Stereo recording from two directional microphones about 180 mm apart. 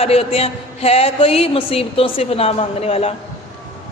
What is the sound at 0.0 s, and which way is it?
A man's voice, 35° left (ahead or behind).